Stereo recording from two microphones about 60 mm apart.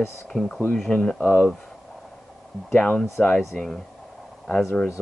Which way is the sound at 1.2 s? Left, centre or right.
Left.